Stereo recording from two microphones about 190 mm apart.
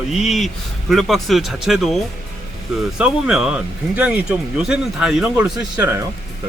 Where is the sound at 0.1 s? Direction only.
Centre (ahead or behind).